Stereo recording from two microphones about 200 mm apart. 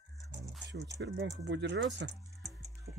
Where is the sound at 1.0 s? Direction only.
60° right (ahead or behind).